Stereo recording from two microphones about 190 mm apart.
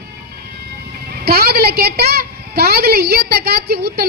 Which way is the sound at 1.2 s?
55° right (ahead or behind).